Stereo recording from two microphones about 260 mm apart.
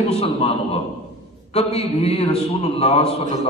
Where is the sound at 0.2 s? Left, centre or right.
Left.